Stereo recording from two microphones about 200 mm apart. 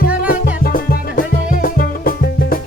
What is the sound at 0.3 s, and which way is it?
Music, 45° left (ahead or behind).